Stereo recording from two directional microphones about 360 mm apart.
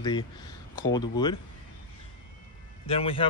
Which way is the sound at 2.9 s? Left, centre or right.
Centre.